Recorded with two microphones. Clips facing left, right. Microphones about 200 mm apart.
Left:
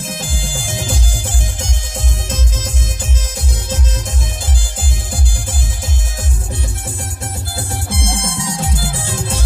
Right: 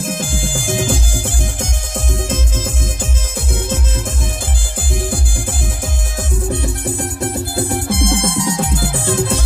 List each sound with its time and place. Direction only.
0.2 s music: 50° right (ahead or behind)
6.5 s music: 60° right (ahead or behind)